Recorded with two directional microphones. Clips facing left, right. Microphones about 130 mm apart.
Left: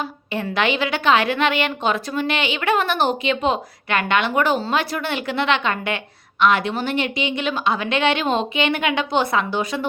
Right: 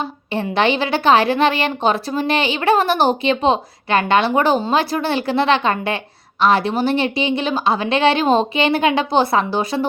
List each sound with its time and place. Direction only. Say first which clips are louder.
0.5 s a woman's voice: right 4 dB; 30° right (ahead or behind)